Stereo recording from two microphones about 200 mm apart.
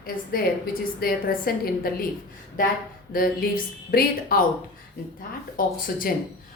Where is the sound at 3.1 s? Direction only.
45° left (ahead or behind).